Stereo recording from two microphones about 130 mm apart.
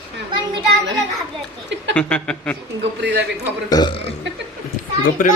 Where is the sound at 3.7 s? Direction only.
30° left (ahead or behind).